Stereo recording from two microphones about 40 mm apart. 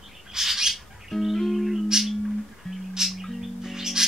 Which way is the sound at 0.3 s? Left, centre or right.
Centre.